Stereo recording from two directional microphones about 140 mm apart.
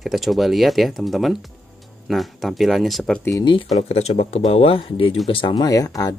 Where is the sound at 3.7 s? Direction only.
50° left (ahead or behind).